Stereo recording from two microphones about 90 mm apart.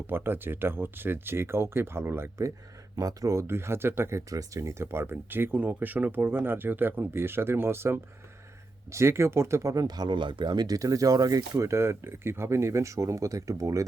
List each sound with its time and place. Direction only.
0.1 s speech: 25° right (ahead or behind)
2.9 s speech: 40° right (ahead or behind)
9.8 s speech: 50° right (ahead or behind)